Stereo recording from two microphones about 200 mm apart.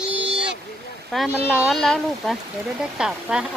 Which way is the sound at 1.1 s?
Centre (ahead or behind).